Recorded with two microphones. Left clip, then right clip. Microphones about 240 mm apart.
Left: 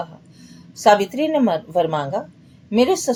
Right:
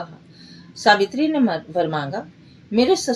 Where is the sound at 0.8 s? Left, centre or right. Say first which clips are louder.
Left 1 dB; left.